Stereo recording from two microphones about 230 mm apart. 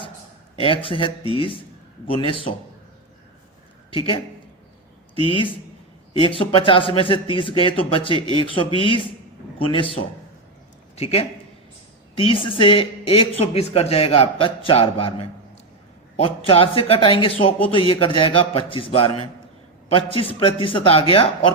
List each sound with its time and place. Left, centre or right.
0.5 s a man's voice: left
3.9 s a man's voice: left
5.3 s a man's voice: left